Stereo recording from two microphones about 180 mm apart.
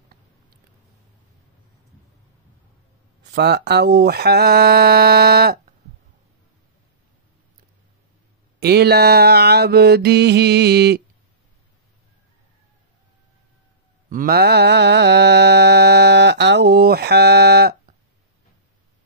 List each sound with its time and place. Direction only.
3.3 s mantra: 65° right (ahead or behind)
8.5 s mantra: 65° right (ahead or behind)
14.0 s mantra: 50° right (ahead or behind)